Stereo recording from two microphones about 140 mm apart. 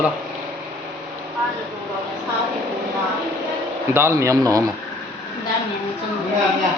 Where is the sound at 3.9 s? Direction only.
20° right (ahead or behind).